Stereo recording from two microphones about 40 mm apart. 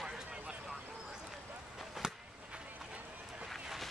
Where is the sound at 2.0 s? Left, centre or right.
Centre.